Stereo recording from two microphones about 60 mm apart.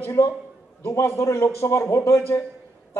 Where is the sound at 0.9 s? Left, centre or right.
Left.